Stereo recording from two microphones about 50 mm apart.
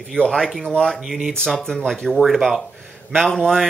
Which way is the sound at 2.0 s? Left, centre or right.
Centre.